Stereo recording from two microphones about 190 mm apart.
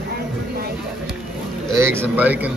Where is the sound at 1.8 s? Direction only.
15° right (ahead or behind).